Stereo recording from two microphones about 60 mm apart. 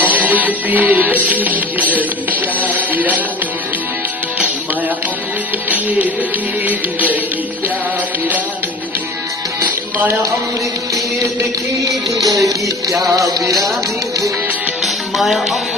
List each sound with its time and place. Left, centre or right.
0.0 s music: right
5.7 s music: right
9.7 s music: right
12.1 s music: right
14.8 s music: centre